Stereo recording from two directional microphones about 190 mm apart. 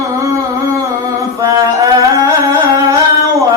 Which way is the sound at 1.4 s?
20° right (ahead or behind).